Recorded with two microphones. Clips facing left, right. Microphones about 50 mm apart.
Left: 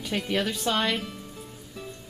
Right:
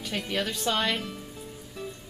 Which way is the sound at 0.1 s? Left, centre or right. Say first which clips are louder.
Left 3 dB; centre.